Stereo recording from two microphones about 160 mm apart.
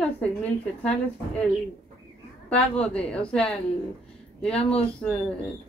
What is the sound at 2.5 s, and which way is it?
A woman's voice, 5° left (ahead or behind).